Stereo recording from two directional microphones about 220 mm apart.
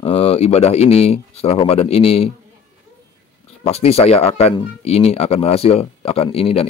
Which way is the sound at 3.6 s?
30° left (ahead or behind).